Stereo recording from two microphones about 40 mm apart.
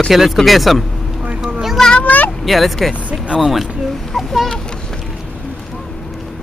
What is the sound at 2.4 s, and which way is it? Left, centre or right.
Speech, centre.